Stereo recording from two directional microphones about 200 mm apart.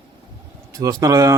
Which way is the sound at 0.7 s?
15° right (ahead or behind).